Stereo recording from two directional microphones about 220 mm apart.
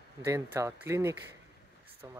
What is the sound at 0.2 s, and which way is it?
Speech, 15° right (ahead or behind).